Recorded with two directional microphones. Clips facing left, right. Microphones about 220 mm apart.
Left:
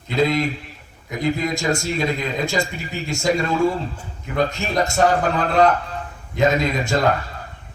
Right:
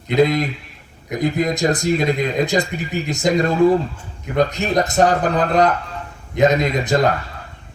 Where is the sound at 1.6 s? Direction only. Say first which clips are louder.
Right 2 dB; 40° right (ahead or behind).